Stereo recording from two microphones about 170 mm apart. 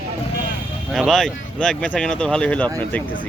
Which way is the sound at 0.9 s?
Centre (ahead or behind).